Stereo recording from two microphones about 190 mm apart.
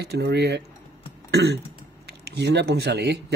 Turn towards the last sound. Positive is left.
turn(degrees=-60)  # may be behind; listen again after turning